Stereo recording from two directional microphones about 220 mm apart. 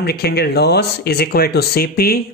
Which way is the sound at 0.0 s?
45° left (ahead or behind).